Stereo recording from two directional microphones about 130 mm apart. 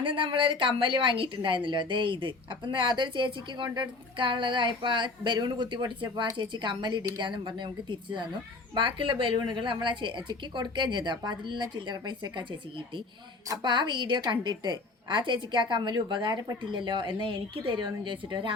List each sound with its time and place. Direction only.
0.0 s a woman's voice: 40° right (ahead or behind)
13.5 s a woman's voice: 35° right (ahead or behind)